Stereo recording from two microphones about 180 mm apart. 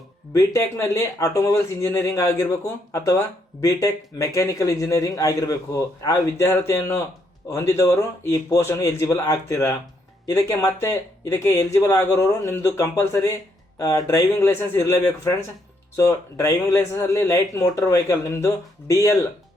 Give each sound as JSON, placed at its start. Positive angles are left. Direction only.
{"t": 0.3, "sound": "speech", "side_deg": 15}